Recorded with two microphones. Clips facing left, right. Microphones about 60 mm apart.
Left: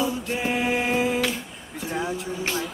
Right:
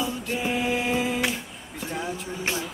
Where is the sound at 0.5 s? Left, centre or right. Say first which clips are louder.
Left 2 dB; centre.